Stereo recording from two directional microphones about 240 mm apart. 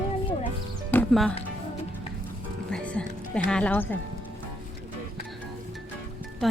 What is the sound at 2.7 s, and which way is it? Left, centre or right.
Music, centre.